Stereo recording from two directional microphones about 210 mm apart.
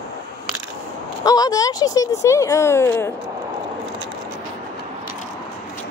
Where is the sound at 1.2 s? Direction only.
20° left (ahead or behind).